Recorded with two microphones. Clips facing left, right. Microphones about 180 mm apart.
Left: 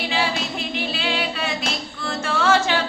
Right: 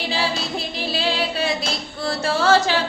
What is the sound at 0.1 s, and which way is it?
Music, 35° right (ahead or behind).